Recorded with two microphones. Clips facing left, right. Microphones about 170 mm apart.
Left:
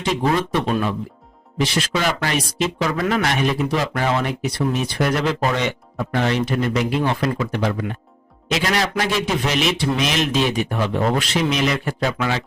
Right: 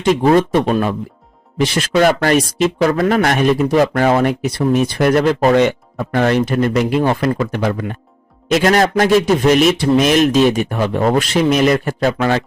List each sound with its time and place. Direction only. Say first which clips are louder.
0.0 s speech: right 8 dB; 50° right (ahead or behind)